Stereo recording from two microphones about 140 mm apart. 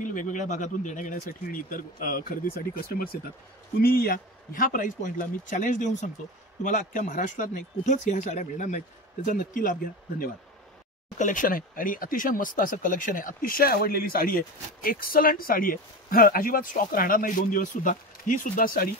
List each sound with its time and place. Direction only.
0.0 s speech: 65° left (ahead or behind); by 10.3 s 90° left
11.1 s speech: 65° left (ahead or behind); by 18.9 s 85° left